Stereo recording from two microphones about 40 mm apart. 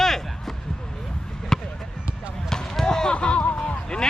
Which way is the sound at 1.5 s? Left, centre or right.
Centre.